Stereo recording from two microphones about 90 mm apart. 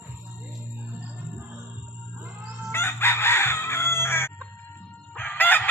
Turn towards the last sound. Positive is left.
turn(degrees=20)  # may be behind; listen again after turning